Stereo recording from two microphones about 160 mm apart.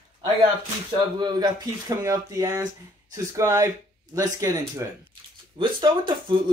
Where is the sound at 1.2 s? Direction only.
25° right (ahead or behind).